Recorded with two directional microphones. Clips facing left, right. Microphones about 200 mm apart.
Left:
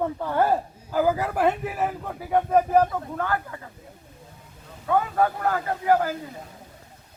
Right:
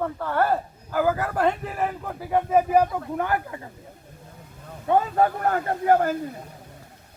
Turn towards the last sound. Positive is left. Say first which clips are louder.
# right 2 dB
turn(degrees=-50)  # may be behind; listen again after turning